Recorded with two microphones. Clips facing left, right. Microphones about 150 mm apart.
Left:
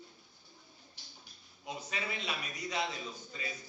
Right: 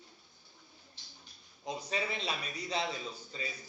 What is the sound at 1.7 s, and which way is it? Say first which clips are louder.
A man's voice: right 4 dB; 35° right (ahead or behind).